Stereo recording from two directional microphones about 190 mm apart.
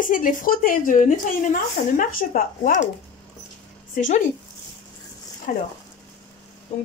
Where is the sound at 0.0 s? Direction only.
45° left (ahead or behind).